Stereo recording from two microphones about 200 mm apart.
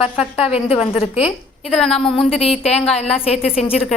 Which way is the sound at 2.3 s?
30° left (ahead or behind).